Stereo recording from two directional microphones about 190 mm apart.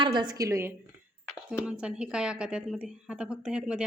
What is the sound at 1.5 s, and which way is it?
Speech, 5° right (ahead or behind).